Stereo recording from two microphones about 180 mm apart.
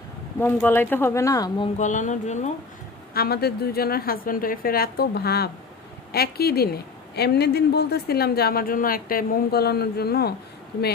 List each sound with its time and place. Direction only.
0.3 s speech: 10° left (ahead or behind)
1.8 s speech: 45° left (ahead or behind)
3.2 s speech: 60° left (ahead or behind)